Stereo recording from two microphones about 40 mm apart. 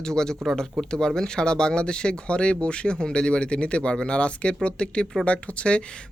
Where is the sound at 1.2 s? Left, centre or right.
Centre.